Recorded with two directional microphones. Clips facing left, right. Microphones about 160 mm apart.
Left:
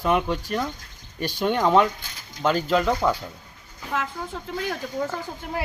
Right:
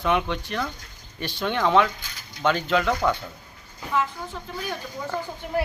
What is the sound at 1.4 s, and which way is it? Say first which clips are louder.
Speech: left 2 dB; 40° left (ahead or behind).